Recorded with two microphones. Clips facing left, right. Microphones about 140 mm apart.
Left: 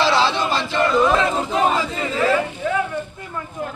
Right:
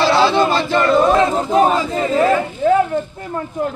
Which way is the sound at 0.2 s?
45° right (ahead or behind).